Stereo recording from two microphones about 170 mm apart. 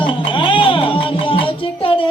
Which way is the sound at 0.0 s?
30° left (ahead or behind).